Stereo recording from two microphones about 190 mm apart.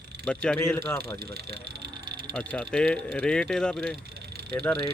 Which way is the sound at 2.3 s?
5° left (ahead or behind).